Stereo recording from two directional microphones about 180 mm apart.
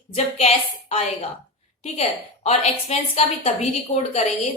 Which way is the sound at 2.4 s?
35° left (ahead or behind).